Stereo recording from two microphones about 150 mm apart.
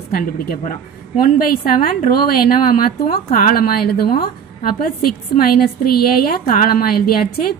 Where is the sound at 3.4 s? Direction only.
90° left.